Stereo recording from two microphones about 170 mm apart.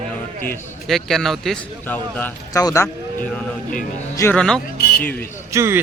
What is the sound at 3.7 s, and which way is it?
Speech, 50° left (ahead or behind).